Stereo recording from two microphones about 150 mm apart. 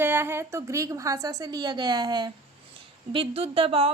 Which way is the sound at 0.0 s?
15° right (ahead or behind).